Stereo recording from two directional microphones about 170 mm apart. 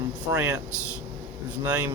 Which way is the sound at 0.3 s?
15° right (ahead or behind).